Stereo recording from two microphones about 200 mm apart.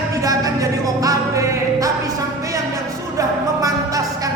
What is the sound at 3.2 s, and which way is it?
Music, 15° right (ahead or behind).